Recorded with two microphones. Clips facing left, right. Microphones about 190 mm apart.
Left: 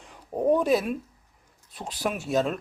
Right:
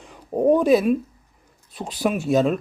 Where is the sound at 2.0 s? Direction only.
Centre (ahead or behind).